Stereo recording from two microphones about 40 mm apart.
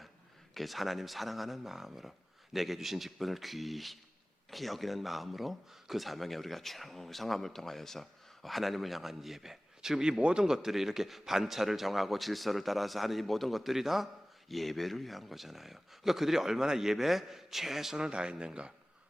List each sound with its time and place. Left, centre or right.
0.5 s speech: centre
18.0 s speech: right